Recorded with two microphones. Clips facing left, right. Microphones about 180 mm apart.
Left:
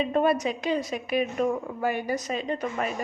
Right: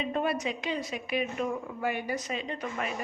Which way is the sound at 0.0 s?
45° left (ahead or behind).